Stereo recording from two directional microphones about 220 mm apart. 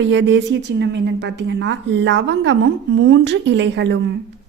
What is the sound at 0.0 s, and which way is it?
A woman's voice, 55° right (ahead or behind).